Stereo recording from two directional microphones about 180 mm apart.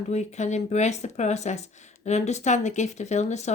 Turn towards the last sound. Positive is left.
turn(degrees=40)  # may be behind; listen again after turning